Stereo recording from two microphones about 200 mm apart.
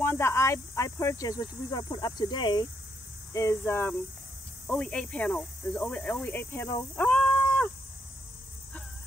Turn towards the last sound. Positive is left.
turn(degrees=5)  # may be behind; listen again after turning